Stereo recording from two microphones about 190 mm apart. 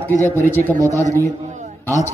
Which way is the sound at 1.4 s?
40° right (ahead or behind).